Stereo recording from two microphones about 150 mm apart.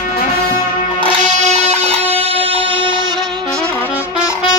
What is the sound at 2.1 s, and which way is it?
Music, 40° right (ahead or behind).